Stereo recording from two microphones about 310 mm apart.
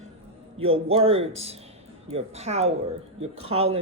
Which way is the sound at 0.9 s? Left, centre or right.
Centre.